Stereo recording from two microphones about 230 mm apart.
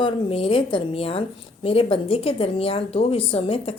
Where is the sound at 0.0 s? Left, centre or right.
Left.